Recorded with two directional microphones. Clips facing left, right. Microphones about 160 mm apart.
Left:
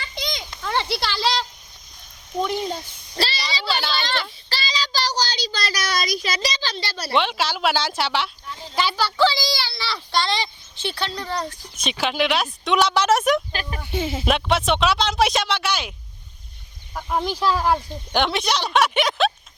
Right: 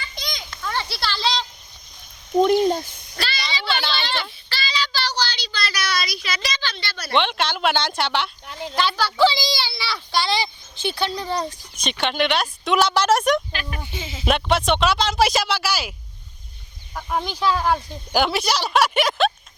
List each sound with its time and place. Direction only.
0.2 s children playing: 25° left (ahead or behind); by 1.5 s 10° left (ahead or behind)
3.2 s a sound: 30° left (ahead or behind)
4.4 s child singing: 35° left (ahead or behind)
7.1 s speech: 5° left (ahead or behind)
9.1 s speech: 15° right (ahead or behind)
11.8 s speech: 5° left (ahead or behind)
13.5 s speech: 35° left (ahead or behind)
13.9 s speech: 60° left (ahead or behind)
14.3 s speech: centre (ahead or behind)